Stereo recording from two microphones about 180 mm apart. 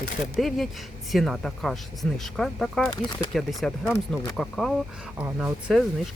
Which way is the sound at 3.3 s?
Centre (ahead or behind).